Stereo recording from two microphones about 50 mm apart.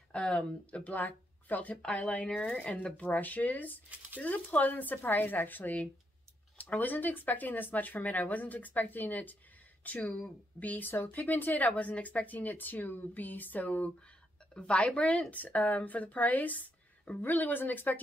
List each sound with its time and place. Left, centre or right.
0.1 s speech: centre
0.7 s a woman's voice: left
3.1 s a woman's voice: left
17.2 s speech: left